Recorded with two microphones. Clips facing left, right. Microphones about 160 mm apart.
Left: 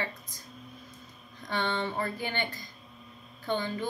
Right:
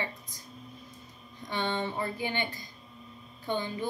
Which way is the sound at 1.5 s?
15° right (ahead or behind).